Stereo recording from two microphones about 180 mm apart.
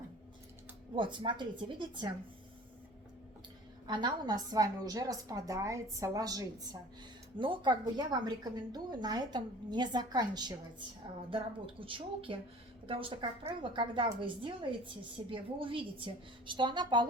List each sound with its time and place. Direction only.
0.9 s a woman's voice: 25° right (ahead or behind)
3.8 s a woman's voice: 25° right (ahead or behind)